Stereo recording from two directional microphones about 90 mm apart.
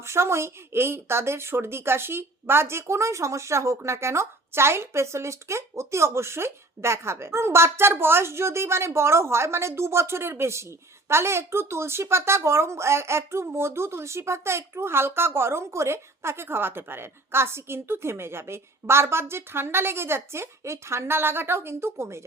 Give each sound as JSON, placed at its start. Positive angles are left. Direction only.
{"t": 0.0, "sound": "speech", "side_deg": -30}